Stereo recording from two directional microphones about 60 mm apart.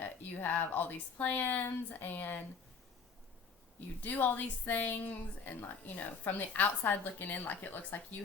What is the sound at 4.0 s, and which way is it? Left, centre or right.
A woman's voice, left.